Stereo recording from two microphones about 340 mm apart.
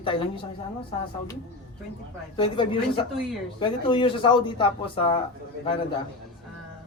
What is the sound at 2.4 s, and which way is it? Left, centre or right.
Speech, centre.